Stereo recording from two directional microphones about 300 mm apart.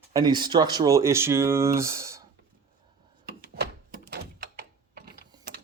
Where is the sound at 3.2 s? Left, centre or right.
Right.